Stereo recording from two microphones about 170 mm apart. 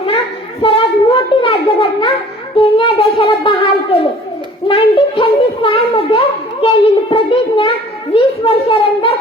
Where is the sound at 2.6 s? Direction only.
30° left (ahead or behind).